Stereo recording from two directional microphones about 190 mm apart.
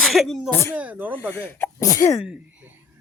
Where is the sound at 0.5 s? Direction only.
10° left (ahead or behind).